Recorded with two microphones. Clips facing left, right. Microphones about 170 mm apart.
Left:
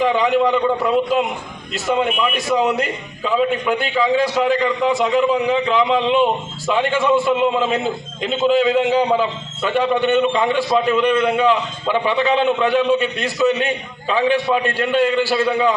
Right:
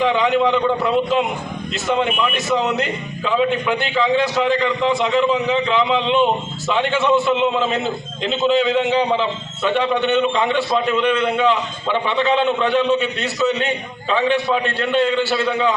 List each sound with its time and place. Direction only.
0.0 s a man's voice: 5° left (ahead or behind)